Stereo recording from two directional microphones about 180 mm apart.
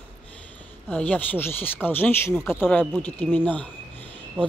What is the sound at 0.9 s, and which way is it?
Speech, 10° left (ahead or behind).